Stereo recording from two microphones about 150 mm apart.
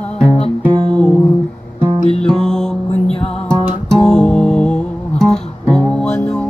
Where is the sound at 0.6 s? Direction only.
30° right (ahead or behind).